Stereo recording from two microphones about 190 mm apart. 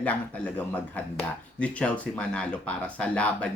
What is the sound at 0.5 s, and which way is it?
Speech, 5° left (ahead or behind).